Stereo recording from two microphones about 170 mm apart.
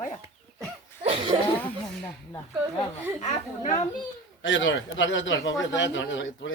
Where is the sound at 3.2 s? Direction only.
45° left (ahead or behind).